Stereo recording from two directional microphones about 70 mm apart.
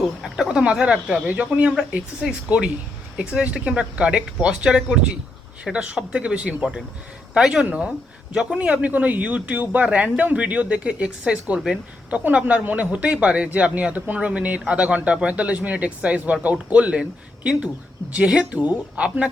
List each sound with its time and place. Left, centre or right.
0.3 s a man's voice: centre